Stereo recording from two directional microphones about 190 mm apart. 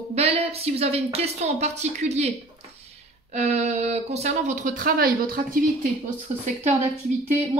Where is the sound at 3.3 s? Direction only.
35° right (ahead or behind).